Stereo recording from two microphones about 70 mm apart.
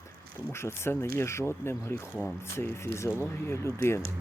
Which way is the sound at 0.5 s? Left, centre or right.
Left.